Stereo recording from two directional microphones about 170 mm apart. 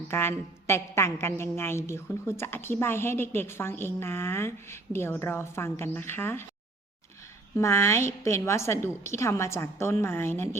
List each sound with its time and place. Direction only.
0.1 s a woman's voice: 15° left (ahead or behind)
7.5 s a woman's voice: 15° left (ahead or behind)